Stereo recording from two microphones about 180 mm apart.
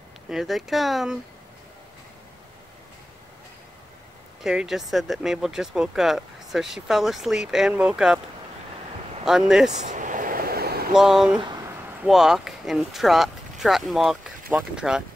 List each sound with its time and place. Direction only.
0.3 s speech: centre (ahead or behind)
4.4 s speech: centre (ahead or behind)
9.2 s speech: centre (ahead or behind)
9.8 s vehicle: 45° right (ahead or behind)
10.9 s speech: centre (ahead or behind)